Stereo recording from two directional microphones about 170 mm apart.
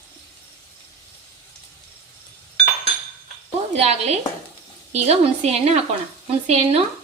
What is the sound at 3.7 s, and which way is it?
Speech, 40° right (ahead or behind).